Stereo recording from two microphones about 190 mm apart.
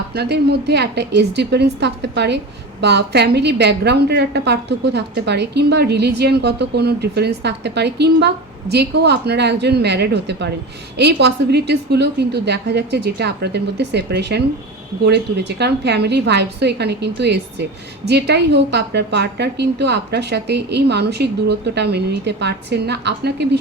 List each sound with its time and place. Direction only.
0.1 s a woman's voice: 60° right (ahead or behind)